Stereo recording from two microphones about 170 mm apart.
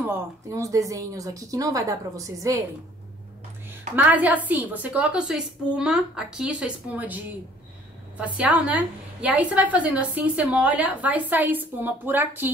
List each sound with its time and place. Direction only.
0.0 s speech: 20° right (ahead or behind)
3.9 s a woman's voice: 10° right (ahead or behind)
8.2 s a woman's voice: 10° right (ahead or behind)